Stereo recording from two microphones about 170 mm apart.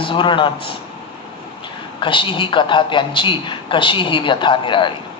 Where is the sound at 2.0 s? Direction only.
30° left (ahead or behind).